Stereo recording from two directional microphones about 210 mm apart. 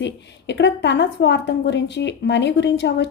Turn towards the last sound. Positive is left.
turn(degrees=55)  # may be behind; listen again after turning